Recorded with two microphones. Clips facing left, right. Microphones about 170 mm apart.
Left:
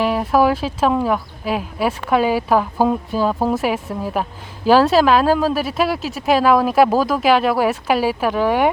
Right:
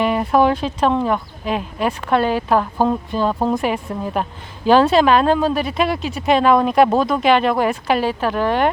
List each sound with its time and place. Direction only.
0.0 s speech: centre (ahead or behind)